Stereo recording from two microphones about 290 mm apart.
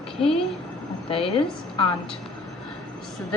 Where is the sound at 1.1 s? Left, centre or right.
Centre.